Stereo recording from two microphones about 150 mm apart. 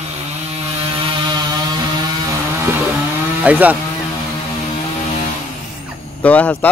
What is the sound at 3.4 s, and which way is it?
Speech, 10° right (ahead or behind).